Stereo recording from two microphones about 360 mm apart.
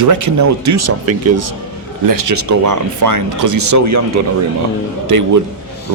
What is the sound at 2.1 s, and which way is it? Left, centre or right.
Speech, right.